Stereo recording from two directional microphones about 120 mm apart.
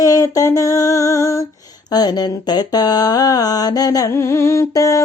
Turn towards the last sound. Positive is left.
turn(degrees=25)  # may be behind; listen again after turning